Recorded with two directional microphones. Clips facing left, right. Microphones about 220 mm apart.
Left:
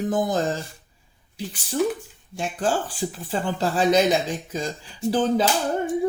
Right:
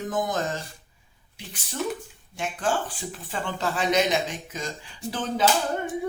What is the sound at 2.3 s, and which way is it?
Speech, 35° left (ahead or behind).